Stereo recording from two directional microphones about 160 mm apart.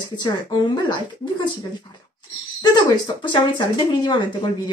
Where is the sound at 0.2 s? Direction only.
30° left (ahead or behind).